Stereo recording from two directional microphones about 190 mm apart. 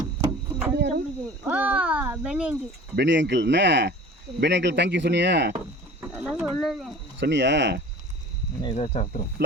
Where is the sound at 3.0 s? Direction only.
65° right (ahead or behind).